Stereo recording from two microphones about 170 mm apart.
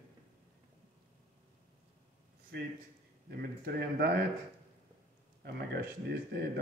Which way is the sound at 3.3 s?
65° right (ahead or behind).